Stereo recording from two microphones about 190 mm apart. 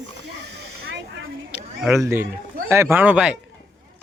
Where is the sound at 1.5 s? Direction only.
10° right (ahead or behind).